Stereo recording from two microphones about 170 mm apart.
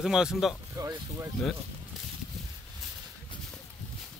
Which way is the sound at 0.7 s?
15° right (ahead or behind).